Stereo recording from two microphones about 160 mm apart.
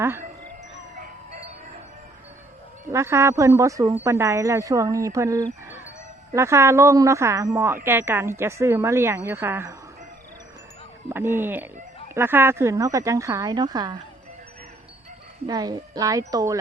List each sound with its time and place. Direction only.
0.0 s a woman's voice: 15° right (ahead or behind)
2.9 s a woman's voice: 15° right (ahead or behind)
11.1 s a woman's voice: 15° right (ahead or behind)
15.4 s speech: 25° right (ahead or behind)